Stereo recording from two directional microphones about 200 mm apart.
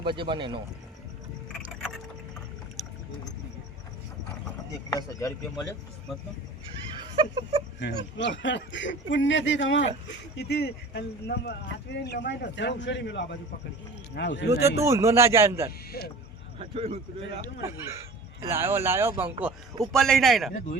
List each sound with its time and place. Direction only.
0.2 s a man's voice: 25° right (ahead or behind)
2.8 s rowboat: centre (ahead or behind)
4.9 s speech: 20° left (ahead or behind)
7.2 s a man's voice: 25° right (ahead or behind)
7.8 s speech: 60° left (ahead or behind)
10.3 s speech: 55° left (ahead or behind)
14.8 s speech: 15° right (ahead or behind)
16.0 s speech: 50° left (ahead or behind)
16.6 s a man's voice: 30° right (ahead or behind)
18.4 s speech: 10° right (ahead or behind)